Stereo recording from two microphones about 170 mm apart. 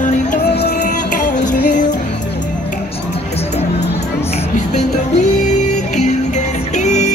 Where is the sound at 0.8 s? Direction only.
50° left (ahead or behind).